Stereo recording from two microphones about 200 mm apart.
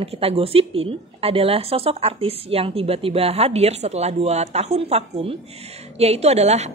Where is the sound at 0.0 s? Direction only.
30° right (ahead or behind).